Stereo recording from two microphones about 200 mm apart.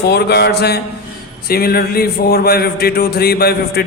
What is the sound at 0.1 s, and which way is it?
A man's voice, 55° left (ahead or behind).